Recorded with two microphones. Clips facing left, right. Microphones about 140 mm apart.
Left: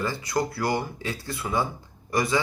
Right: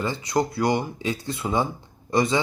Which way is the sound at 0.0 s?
20° right (ahead or behind).